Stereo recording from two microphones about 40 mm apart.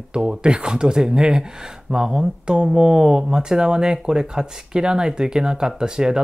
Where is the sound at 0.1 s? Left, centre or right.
Right.